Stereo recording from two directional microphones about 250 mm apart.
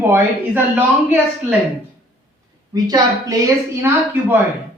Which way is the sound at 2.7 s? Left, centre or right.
Centre.